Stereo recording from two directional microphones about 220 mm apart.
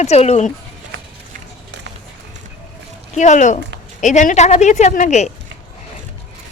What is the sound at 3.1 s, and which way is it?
Speech, 35° left (ahead or behind).